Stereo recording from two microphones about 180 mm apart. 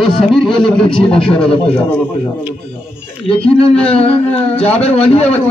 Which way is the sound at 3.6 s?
30° left (ahead or behind).